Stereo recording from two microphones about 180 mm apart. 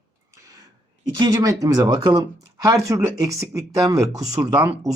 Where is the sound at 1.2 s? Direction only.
20° right (ahead or behind).